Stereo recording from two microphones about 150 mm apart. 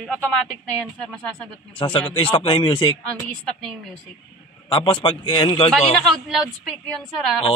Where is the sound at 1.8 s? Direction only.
40° left (ahead or behind).